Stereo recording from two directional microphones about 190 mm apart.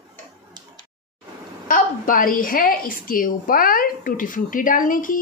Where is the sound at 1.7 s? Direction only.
45° left (ahead or behind).